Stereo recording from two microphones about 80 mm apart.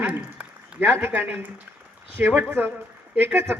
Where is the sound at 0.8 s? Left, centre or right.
Right.